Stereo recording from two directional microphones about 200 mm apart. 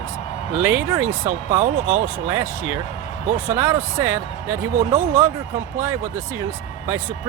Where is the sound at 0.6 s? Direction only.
10° right (ahead or behind).